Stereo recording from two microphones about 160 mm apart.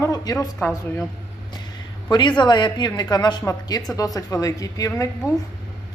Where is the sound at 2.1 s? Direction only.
30° left (ahead or behind).